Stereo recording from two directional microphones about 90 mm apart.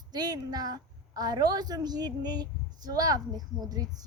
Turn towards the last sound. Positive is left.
turn(degrees=-45)  # may be behind; listen again after turning